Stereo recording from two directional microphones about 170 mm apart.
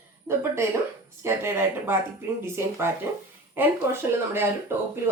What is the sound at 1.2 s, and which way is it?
Speech, 15° right (ahead or behind).